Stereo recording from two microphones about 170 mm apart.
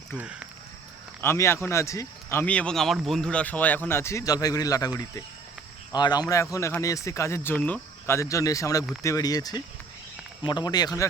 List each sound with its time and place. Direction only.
0.2 s speech: 5° right (ahead or behind)
1.2 s speech: 15° left (ahead or behind)